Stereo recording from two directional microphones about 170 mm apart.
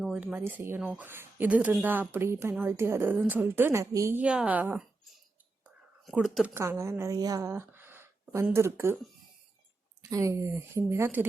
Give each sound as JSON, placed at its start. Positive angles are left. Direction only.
{"t": 0.0, "sound": "a woman's voice", "side_deg": -5}
{"t": 5.6, "sound": "whispering", "side_deg": -5}
{"t": 6.5, "sound": "a woman's voice", "side_deg": -15}
{"t": 10.0, "sound": "a woman's voice", "side_deg": -20}